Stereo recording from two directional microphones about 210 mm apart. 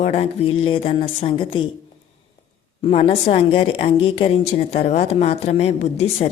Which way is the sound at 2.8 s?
25° left (ahead or behind).